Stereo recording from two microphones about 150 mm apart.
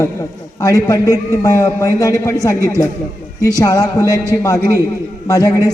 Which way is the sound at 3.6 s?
25° left (ahead or behind).